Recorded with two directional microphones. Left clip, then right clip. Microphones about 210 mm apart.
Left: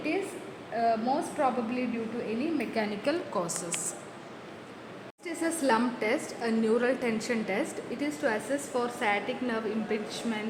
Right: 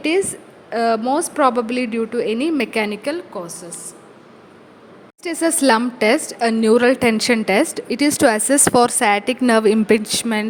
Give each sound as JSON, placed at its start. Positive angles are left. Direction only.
{"t": 0.7, "sound": "a woman's voice", "side_deg": -35}
{"t": 2.7, "sound": "a woman's voice", "side_deg": -20}
{"t": 5.2, "sound": "a woman's voice", "side_deg": -40}